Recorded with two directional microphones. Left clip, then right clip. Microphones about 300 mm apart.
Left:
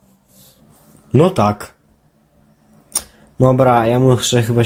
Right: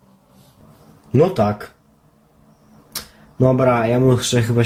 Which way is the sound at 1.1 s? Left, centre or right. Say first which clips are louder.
Left 3 dB; left.